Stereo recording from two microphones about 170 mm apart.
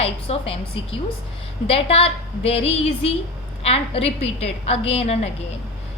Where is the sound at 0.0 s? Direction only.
35° left (ahead or behind).